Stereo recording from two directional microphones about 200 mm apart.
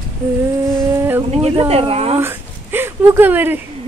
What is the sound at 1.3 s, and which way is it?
Speech, 30° right (ahead or behind).